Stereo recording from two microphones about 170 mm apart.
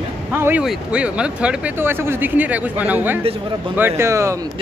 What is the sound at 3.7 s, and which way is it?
Speech, 15° right (ahead or behind).